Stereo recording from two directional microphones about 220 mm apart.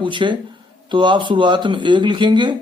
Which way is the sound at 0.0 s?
20° right (ahead or behind).